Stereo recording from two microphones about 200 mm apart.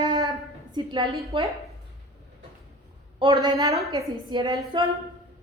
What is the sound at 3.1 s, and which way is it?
A woman's voice, 20° right (ahead or behind).